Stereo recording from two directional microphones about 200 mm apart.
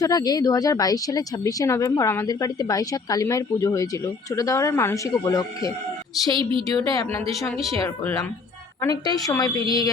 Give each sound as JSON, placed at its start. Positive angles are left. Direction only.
{"t": 0.0, "sound": "a woman's voice", "side_deg": 20}